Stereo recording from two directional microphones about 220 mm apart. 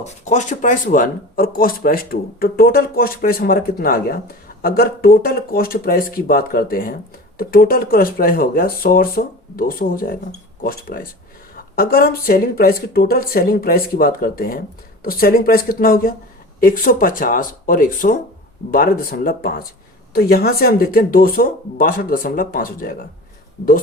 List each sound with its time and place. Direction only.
0.0 s speech: 30° left (ahead or behind)